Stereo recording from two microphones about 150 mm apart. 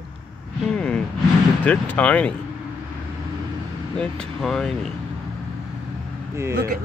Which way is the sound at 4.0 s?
Centre (ahead or behind).